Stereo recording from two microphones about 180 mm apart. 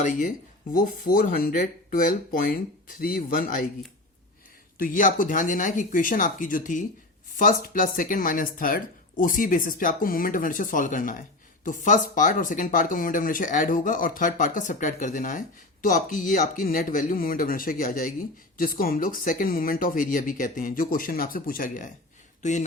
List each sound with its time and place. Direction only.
0.0 s speech: 45° left (ahead or behind)
4.8 s speech: 50° left (ahead or behind)